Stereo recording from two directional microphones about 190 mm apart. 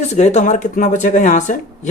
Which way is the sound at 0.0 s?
35° left (ahead or behind).